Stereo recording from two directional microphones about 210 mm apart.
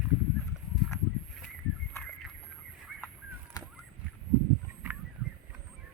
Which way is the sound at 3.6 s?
15° left (ahead or behind).